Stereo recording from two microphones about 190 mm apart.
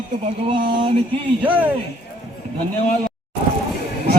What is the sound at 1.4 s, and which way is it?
Speech, 10° right (ahead or behind).